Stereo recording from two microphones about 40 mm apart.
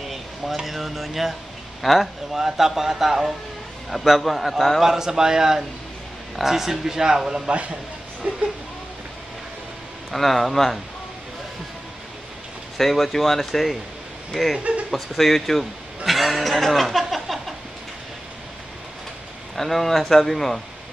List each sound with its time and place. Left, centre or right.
0.7 s speech: centre
4.8 s speech: centre
8.2 s a sound: right
10.1 s speech: centre
12.7 s speech: centre
16.1 s chuckle: centre
17.0 s a sound: centre
19.5 s speech: centre